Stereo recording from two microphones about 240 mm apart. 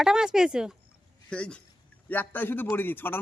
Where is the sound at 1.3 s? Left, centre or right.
Centre.